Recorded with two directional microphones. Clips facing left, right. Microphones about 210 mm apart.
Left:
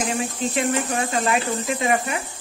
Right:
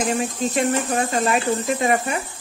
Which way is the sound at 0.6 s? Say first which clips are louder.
Right 2 dB; 40° right (ahead or behind).